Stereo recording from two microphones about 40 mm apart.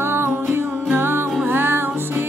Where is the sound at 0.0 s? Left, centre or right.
Right.